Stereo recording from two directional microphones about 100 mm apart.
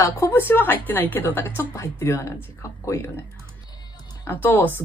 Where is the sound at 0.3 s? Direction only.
20° left (ahead or behind).